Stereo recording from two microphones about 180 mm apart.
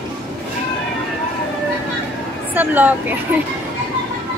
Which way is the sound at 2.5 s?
10° right (ahead or behind).